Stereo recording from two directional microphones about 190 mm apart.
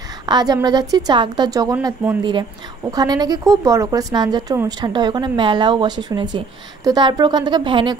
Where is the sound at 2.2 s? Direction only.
25° right (ahead or behind).